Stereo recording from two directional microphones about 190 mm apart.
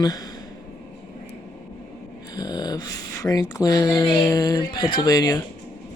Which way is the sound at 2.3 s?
20° left (ahead or behind).